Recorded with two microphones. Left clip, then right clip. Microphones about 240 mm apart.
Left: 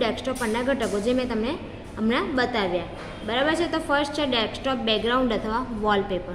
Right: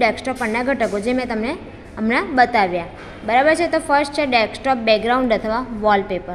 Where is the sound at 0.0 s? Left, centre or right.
Right.